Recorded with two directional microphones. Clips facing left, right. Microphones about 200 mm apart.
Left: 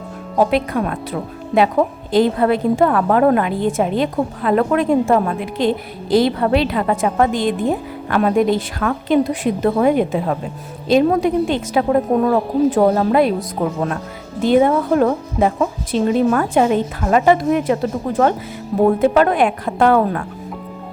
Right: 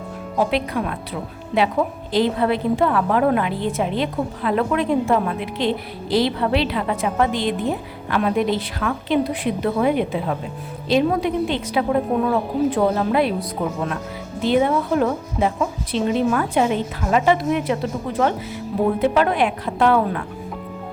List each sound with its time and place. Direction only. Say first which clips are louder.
0.3 s a woman's voice: left 5 dB; 50° left (ahead or behind)
2.1 s a woman's voice: left 4 dB; 45° left (ahead or behind)
14.4 s a woman's voice: left 4 dB; 45° left (ahead or behind)